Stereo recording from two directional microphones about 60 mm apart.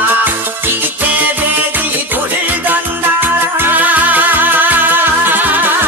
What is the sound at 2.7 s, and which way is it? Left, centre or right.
Music, right.